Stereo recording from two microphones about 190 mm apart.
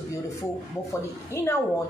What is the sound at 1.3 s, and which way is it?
Speech, 15° left (ahead or behind).